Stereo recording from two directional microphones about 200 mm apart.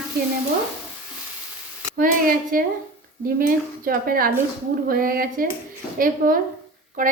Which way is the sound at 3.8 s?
45° right (ahead or behind).